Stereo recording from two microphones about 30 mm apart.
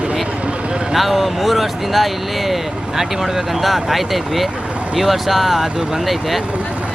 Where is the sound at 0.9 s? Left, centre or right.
Centre.